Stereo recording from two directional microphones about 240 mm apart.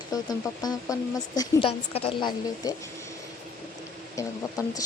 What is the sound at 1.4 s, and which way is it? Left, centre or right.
Speech, left.